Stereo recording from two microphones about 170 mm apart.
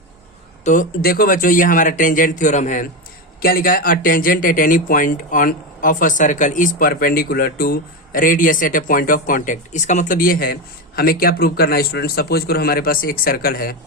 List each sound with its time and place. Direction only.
0.6 s speech: 50° left (ahead or behind)
3.4 s speech: 60° left (ahead or behind)